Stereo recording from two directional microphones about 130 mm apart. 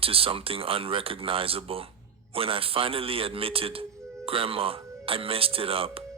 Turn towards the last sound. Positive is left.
turn(degrees=-45)  # may be behind; listen again after turning